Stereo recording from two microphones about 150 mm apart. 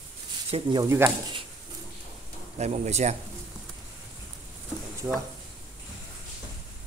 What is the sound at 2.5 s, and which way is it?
Speech, 50° right (ahead or behind).